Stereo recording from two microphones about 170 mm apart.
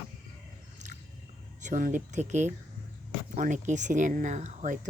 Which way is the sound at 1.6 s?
50° right (ahead or behind).